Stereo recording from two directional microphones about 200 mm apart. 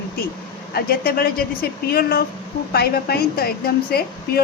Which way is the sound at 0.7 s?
50° left (ahead or behind).